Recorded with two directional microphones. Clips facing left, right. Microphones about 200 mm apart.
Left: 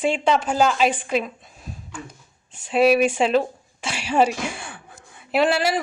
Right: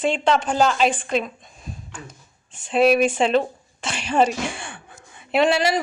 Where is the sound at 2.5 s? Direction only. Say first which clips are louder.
Even; 5° left (ahead or behind).